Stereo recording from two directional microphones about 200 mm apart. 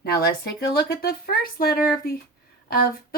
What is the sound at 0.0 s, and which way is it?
Speech, 50° left (ahead or behind).